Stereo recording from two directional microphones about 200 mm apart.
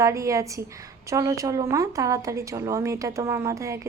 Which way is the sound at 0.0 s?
15° right (ahead or behind).